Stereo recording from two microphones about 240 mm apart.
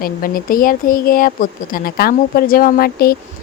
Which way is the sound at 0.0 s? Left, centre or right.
Left.